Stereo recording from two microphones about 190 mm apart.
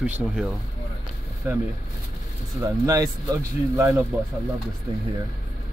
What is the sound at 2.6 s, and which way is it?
Speech, 15° right (ahead or behind).